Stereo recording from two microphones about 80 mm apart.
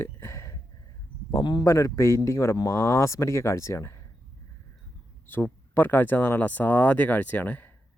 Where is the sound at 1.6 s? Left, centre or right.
Left.